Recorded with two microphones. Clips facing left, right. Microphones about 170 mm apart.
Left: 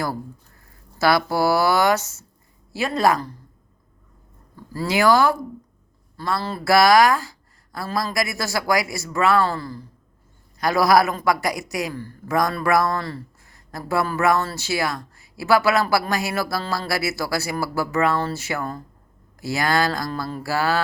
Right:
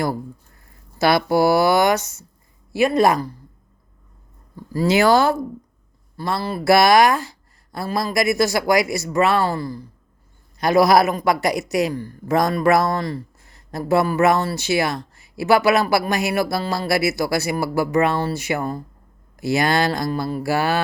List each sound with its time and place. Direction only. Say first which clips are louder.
0.9 s speech: right 3 dB; 20° right (ahead or behind)
4.5 s speech: right 5 dB; 15° right (ahead or behind)